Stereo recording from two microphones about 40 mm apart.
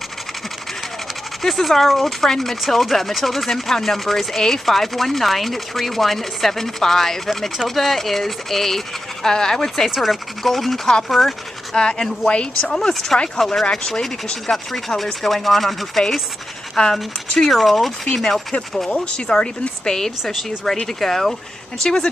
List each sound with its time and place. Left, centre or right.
1.4 s speech: centre
9.8 s speech: centre
11.7 s a woman's voice: left
12.7 s speech: centre
16.7 s speech: centre
17.5 s speech: centre
18.9 s a woman's voice: left